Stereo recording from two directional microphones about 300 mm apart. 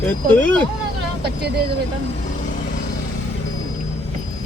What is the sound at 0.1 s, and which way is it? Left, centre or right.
Speech, centre.